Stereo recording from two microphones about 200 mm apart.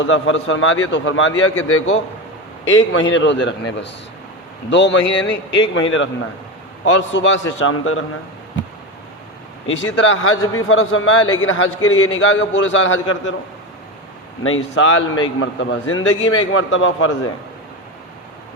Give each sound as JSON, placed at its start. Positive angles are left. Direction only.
{"t": 0.0, "sound": "a man's voice", "side_deg": 80}
{"t": 2.6, "sound": "a man's voice", "side_deg": 75}
{"t": 9.6, "sound": "a man's voice", "side_deg": 70}
{"t": 14.4, "sound": "a man's voice", "side_deg": 85}